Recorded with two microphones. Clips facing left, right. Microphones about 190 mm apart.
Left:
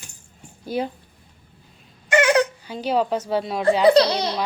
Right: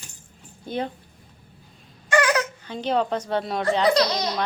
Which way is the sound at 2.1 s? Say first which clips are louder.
Left 4 dB; 25° left (ahead or behind).